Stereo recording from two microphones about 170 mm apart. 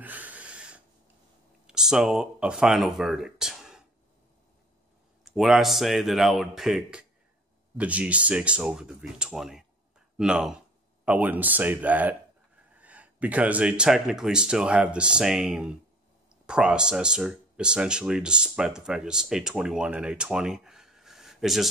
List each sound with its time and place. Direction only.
0.0 s a sound: 10° right (ahead or behind)
1.7 s speech: 5° right (ahead or behind)
5.2 s speech: centre (ahead or behind)